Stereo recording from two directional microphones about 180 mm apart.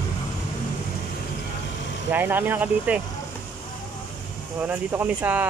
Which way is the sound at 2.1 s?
10° right (ahead or behind).